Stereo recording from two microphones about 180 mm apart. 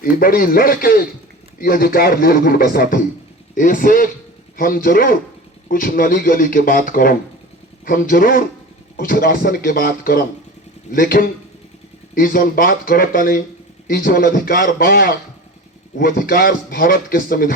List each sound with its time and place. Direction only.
0.0 s a man's voice: 55° left (ahead or behind)